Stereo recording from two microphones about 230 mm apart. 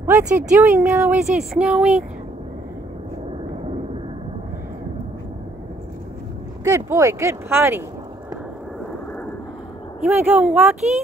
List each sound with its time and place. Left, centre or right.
0.0 s speech: centre
6.6 s speech: centre
10.0 s speech: centre